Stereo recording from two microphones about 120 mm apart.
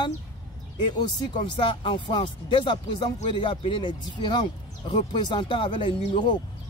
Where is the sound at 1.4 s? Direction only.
45° left (ahead or behind).